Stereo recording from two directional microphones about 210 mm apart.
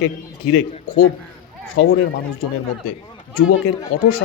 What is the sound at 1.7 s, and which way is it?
Speech, 65° left (ahead or behind).